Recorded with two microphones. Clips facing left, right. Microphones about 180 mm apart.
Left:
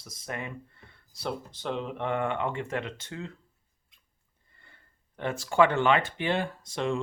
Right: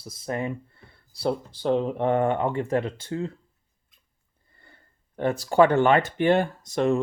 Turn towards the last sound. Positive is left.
turn(degrees=-45)  # may be behind; listen again after turning